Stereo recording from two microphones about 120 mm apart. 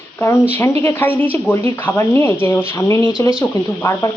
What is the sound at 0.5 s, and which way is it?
A woman's voice, 15° left (ahead or behind).